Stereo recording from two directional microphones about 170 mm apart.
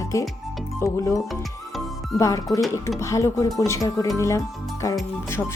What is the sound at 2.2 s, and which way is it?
Speech, 20° left (ahead or behind).